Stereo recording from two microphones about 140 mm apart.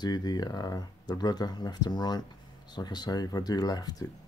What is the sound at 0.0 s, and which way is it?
Speech, 30° left (ahead or behind).